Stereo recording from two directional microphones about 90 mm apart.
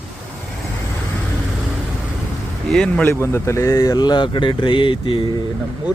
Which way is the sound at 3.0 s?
30° left (ahead or behind).